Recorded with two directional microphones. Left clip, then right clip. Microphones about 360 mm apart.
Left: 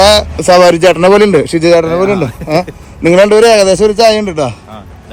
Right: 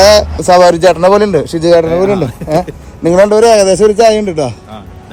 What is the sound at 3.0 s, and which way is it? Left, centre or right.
A man's voice, left.